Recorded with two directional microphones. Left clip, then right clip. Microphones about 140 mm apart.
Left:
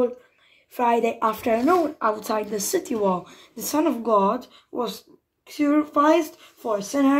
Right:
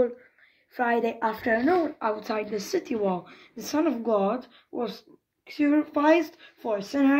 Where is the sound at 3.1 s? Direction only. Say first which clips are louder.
Left 4 dB; 55° left (ahead or behind).